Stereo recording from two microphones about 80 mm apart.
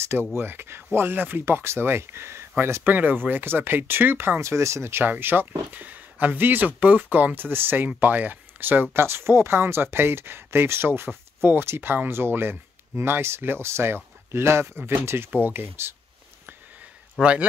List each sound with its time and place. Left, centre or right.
0.3 s speech: right
17.2 s speech: centre